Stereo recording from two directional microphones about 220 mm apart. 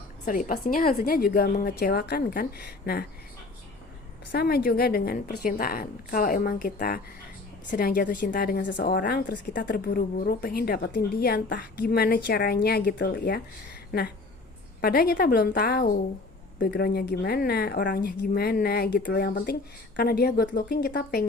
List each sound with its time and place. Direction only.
0.3 s a woman's voice: 40° left (ahead or behind)
4.3 s a woman's voice: 45° left (ahead or behind)
14.8 s a woman's voice: 45° left (ahead or behind)